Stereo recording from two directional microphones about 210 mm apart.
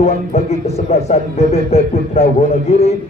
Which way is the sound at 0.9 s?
30° left (ahead or behind).